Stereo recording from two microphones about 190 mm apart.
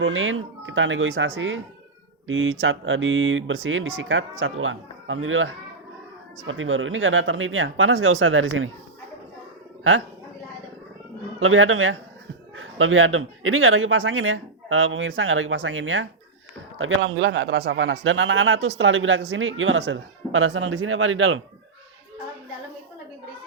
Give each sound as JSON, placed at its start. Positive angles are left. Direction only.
{"t": 0.0, "sound": "speech", "side_deg": -90}
{"t": 11.3, "sound": "speech", "side_deg": -90}
{"t": 18.8, "sound": "speech", "side_deg": -90}